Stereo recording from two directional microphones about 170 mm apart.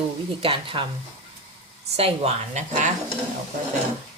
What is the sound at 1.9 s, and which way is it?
Speech, 35° right (ahead or behind).